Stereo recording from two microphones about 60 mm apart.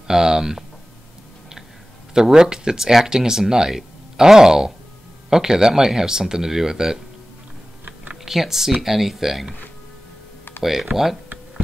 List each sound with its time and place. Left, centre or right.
0.1 s speech: centre
2.1 s speech: centre
8.3 s speech: centre
10.6 s speech: centre